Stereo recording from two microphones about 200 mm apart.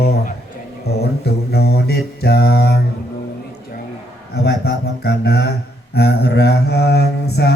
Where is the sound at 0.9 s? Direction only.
55° left (ahead or behind).